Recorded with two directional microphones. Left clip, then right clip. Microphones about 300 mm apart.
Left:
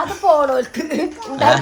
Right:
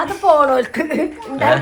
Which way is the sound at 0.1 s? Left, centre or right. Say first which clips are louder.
Right 1 dB; right.